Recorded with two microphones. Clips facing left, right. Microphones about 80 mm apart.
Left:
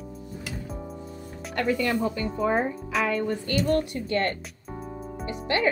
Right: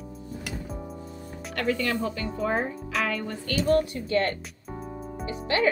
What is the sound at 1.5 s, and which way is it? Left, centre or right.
Speech, left.